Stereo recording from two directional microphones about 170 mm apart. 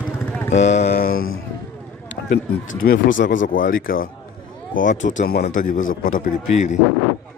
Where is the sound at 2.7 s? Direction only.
55° left (ahead or behind).